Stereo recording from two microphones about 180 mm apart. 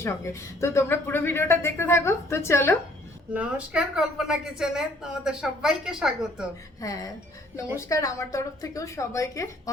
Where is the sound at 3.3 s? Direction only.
5° right (ahead or behind).